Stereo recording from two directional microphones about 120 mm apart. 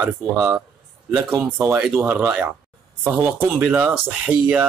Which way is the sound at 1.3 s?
20° right (ahead or behind).